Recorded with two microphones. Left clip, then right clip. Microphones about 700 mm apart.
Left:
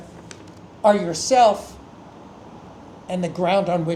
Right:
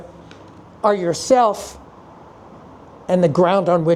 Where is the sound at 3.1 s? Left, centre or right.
Right.